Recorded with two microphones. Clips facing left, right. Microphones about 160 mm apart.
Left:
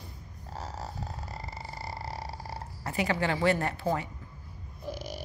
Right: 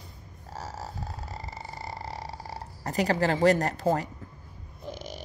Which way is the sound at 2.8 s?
40° right (ahead or behind).